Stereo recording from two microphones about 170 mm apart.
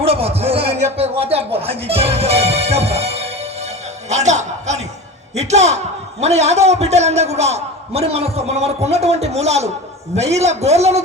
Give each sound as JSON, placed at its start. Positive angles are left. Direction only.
{"t": 0.0, "sound": "a man's voice", "side_deg": -35}
{"t": 4.1, "sound": "music", "side_deg": -40}
{"t": 5.4, "sound": "a man's voice", "side_deg": -40}